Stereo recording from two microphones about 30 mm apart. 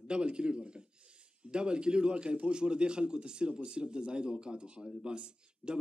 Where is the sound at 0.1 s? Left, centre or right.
Right.